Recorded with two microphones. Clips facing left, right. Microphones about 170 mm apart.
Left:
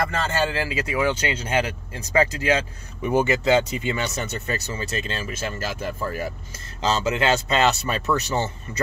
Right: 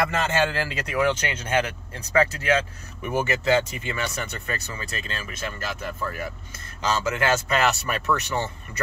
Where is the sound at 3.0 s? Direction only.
20° left (ahead or behind).